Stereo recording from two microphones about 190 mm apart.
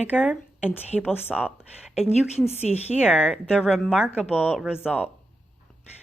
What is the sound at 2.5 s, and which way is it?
Speech, 35° left (ahead or behind).